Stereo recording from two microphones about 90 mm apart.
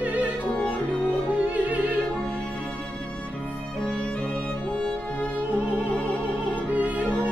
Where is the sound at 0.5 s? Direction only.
15° left (ahead or behind).